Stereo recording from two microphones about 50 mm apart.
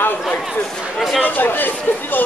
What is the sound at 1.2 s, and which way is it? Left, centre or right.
Speech, left.